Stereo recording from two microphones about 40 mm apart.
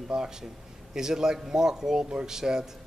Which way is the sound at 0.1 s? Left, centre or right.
Centre.